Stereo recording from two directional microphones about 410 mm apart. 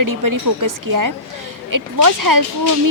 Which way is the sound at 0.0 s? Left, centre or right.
Right.